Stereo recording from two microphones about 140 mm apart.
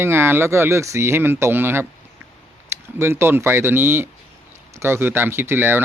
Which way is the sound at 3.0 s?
15° right (ahead or behind).